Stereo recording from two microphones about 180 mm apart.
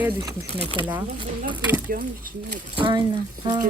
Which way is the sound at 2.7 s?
25° right (ahead or behind).